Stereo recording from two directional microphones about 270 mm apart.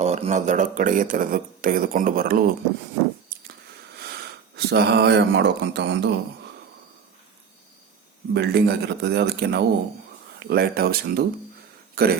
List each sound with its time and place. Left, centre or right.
0.0 s speech: right
4.5 s speech: right
8.3 s speech: right